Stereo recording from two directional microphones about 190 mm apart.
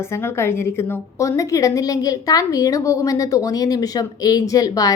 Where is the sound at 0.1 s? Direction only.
15° left (ahead or behind).